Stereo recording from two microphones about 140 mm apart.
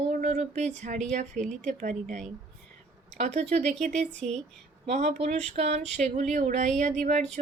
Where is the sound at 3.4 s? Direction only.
50° right (ahead or behind).